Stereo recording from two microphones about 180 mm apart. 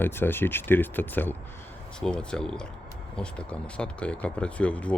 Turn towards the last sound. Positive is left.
turn(degrees=5)  # may be behind; listen again after turning